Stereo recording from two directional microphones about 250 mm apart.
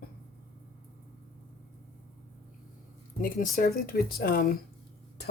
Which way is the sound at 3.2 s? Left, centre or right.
Left.